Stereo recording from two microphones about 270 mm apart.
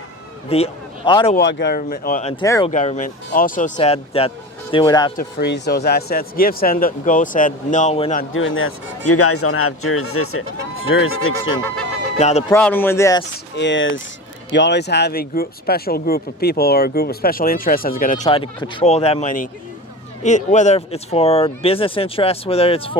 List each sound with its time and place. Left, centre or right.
0.5 s speech: centre
1.4 s speech: left
2.3 s speech: centre
2.6 s speech: left
5.1 s speech: left
8.2 s speech: left
12.2 s speech: left
12.5 s speech: centre
13.6 s speech: left